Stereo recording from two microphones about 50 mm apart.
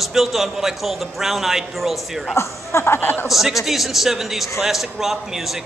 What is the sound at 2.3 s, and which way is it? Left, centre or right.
Speech, left.